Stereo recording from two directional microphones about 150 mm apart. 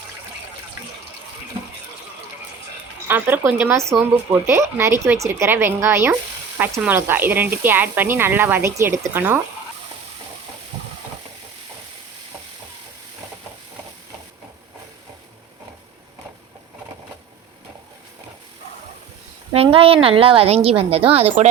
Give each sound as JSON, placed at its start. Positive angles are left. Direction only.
{"t": 3.1, "sound": "speech", "side_deg": -10}
{"t": 19.5, "sound": "a woman's voice", "side_deg": -40}